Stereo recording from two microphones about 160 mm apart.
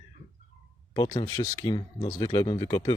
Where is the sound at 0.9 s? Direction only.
30° left (ahead or behind).